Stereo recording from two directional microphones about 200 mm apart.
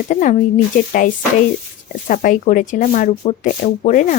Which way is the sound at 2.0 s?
40° left (ahead or behind).